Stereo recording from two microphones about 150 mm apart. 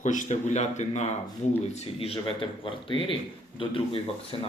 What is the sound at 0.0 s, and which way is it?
Speech, 55° left (ahead or behind).